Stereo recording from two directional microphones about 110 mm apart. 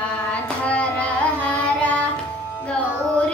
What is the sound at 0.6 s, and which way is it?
Carnatic music, 15° left (ahead or behind).